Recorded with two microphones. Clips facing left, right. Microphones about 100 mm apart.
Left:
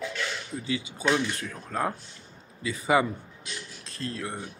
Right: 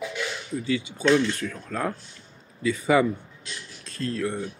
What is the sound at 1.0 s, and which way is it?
Speech, 15° left (ahead or behind).